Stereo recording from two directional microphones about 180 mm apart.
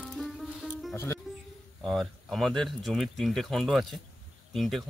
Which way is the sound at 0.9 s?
15° left (ahead or behind).